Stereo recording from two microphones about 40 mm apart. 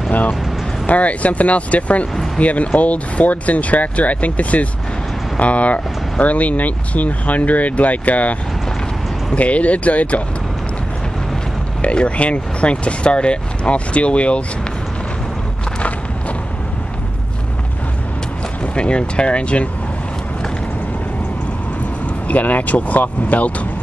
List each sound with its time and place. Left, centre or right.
0.8 s speech: left
11.8 s speech: left
18.8 s speech: left
22.3 s speech: left